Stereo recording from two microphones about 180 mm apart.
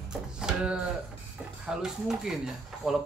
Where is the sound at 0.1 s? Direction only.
5° right (ahead or behind).